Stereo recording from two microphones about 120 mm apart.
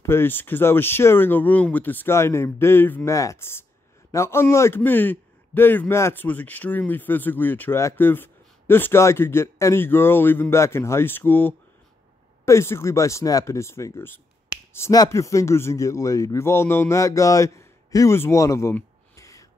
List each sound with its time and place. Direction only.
0.0 s a man's voice: 20° left (ahead or behind)
19.1 s gasp: 25° left (ahead or behind)